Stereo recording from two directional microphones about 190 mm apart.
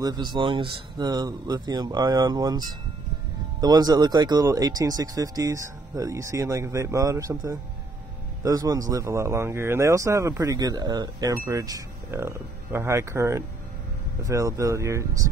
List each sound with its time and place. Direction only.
0.0 s speech: 20° right (ahead or behind)